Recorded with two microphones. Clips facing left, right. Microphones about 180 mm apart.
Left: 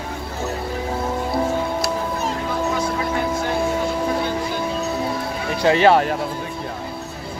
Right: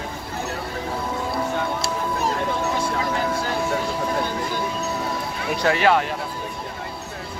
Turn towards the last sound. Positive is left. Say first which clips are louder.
# left 4 dB
turn(degrees=25)  # may be behind; listen again after turning